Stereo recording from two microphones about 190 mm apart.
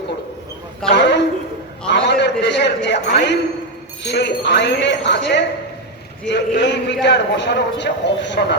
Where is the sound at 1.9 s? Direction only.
65° left (ahead or behind).